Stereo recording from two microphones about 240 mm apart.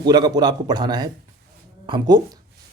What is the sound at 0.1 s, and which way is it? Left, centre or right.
A man's voice, centre.